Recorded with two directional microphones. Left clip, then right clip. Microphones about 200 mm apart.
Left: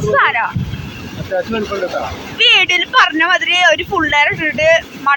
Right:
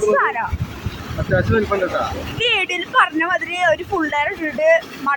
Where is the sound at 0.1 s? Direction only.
5° left (ahead or behind).